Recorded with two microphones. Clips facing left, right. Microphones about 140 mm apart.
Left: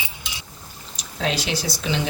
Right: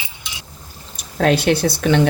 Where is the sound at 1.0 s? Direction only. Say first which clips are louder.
Right 9 dB; 55° right (ahead or behind).